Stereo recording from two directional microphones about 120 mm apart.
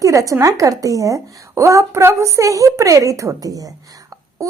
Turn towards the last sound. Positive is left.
turn(degrees=-30)  # may be behind; listen again after turning